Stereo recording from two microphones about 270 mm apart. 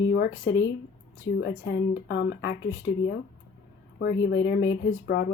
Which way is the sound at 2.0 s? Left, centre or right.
Left.